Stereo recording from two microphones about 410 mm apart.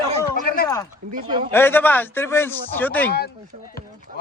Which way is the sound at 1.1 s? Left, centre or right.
Centre.